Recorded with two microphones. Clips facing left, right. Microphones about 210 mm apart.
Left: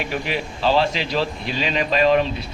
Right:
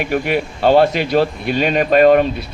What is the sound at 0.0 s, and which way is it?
Speech, 55° right (ahead or behind).